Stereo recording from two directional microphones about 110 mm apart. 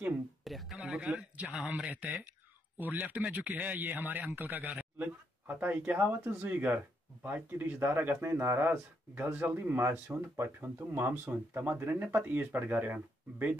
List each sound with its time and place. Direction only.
0.4 s a man's voice: centre (ahead or behind); by 13.6 s 15° right (ahead or behind)